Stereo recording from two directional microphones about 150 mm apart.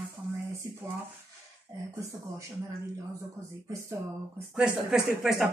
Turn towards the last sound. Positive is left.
turn(degrees=0)  # may be behind; listen again after turning